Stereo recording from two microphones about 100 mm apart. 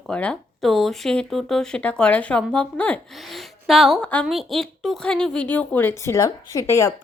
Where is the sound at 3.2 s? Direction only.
Centre (ahead or behind); by 6.9 s 30° left (ahead or behind).